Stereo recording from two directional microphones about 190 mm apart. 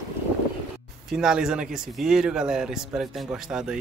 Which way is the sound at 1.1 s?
5° right (ahead or behind).